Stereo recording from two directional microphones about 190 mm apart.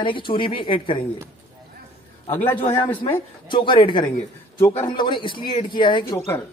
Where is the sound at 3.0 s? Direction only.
25° left (ahead or behind).